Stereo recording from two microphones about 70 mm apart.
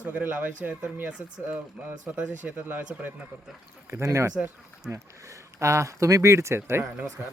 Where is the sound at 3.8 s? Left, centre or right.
Right.